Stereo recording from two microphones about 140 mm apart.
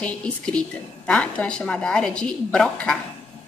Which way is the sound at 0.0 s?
10° left (ahead or behind).